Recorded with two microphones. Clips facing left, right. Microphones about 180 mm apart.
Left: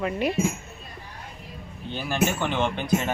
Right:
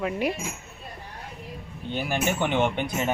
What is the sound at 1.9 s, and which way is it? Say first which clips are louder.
Speech: left 1 dB; 15° right (ahead or behind).